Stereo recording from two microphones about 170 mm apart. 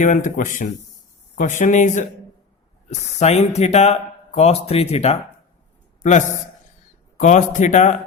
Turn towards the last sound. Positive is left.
turn(degrees=45)  # may be behind; listen again after turning